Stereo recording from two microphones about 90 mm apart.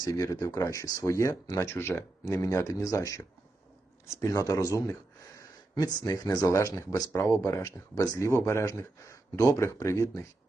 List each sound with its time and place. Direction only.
0.0 s speech: 45° left (ahead or behind)